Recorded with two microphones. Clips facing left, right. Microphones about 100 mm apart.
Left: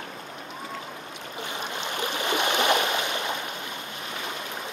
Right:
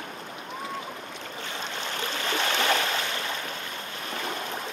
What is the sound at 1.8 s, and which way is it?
Stream, 15° left (ahead or behind).